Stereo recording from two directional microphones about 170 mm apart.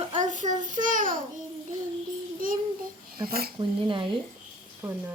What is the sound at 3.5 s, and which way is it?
Speech, 30° right (ahead or behind).